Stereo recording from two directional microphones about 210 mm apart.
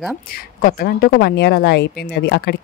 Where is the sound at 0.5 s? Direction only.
45° left (ahead or behind).